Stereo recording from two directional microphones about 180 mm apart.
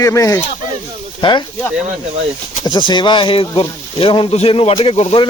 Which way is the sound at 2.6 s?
25° left (ahead or behind).